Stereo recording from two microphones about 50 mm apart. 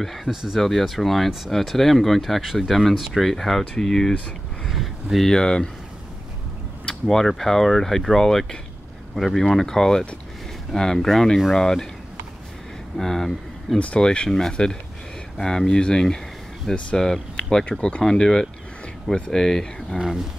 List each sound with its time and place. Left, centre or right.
0.0 s speech: centre
4.6 s speech: centre
5.2 s speech: centre
6.9 s speech: centre
12.9 s speech: centre
13.7 s speech: left; by 20.0 s centre
20.0 s speech: centre